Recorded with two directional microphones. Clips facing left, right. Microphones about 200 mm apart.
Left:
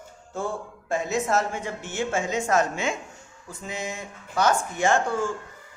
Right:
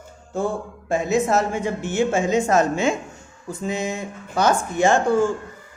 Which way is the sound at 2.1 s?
25° right (ahead or behind).